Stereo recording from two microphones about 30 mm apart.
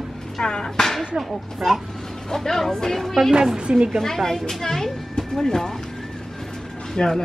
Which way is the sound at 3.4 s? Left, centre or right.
Centre.